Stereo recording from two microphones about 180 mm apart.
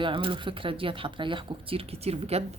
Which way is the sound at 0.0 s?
30° right (ahead or behind).